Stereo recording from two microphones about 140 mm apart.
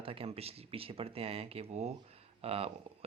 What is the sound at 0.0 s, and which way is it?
A man's voice, 40° right (ahead or behind).